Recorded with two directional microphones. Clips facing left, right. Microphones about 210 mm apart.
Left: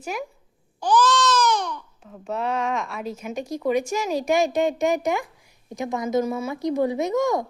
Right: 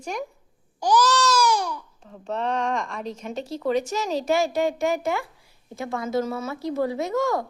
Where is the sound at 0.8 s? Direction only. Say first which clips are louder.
Left 1 dB; 10° right (ahead or behind).